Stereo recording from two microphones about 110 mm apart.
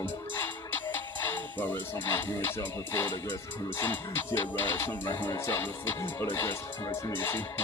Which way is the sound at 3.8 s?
20° left (ahead or behind).